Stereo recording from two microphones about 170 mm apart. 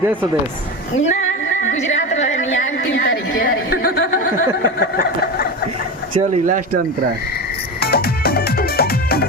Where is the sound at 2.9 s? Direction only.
90° left.